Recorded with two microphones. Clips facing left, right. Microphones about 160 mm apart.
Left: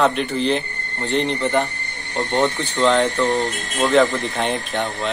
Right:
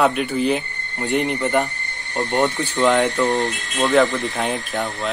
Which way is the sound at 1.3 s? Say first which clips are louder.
Even; centre (ahead or behind).